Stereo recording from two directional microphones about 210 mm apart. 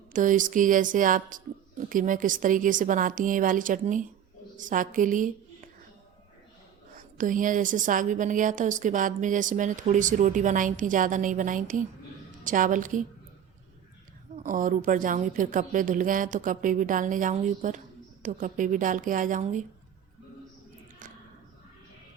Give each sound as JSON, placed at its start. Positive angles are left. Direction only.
{"t": 0.1, "sound": "a woman's voice", "side_deg": -40}
{"t": 6.9, "sound": "speech", "side_deg": -40}
{"t": 14.4, "sound": "speech", "side_deg": -40}